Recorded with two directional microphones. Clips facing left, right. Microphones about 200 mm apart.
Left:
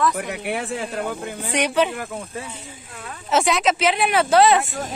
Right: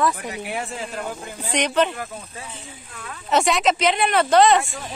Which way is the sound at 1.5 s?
10° left (ahead or behind).